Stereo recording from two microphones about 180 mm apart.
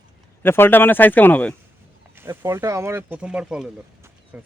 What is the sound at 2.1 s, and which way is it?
Speech, 15° right (ahead or behind).